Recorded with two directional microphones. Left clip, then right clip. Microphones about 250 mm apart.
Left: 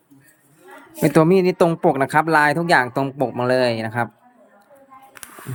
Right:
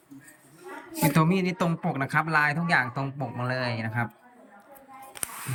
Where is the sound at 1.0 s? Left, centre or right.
Left.